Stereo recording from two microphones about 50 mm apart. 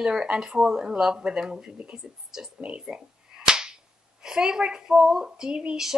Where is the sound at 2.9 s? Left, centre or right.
Centre.